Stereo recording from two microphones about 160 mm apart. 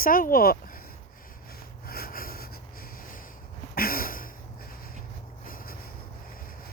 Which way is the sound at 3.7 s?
65° left (ahead or behind).